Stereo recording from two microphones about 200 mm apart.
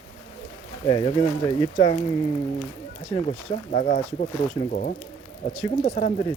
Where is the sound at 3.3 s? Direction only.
35° left (ahead or behind).